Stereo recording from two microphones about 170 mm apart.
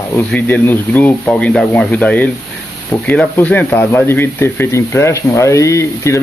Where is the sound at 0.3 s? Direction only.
10° left (ahead or behind).